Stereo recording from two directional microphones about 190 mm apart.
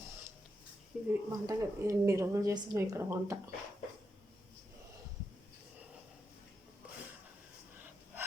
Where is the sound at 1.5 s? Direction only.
15° right (ahead or behind).